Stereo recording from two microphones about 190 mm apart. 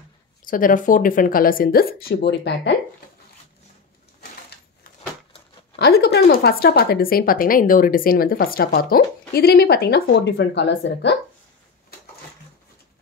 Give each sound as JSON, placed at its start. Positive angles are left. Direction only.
{"t": 0.5, "sound": "speech", "side_deg": 45}
{"t": 5.8, "sound": "a woman's voice", "side_deg": 55}